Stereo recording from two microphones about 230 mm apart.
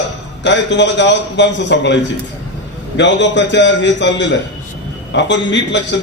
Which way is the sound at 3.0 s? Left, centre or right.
Left.